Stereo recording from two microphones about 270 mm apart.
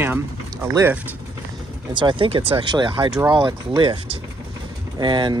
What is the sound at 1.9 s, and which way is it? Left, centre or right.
Speech, centre.